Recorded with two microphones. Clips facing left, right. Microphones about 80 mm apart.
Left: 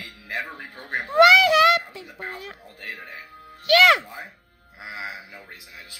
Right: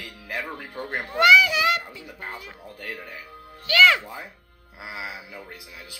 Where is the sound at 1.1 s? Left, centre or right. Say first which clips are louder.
Left 3 dB; left.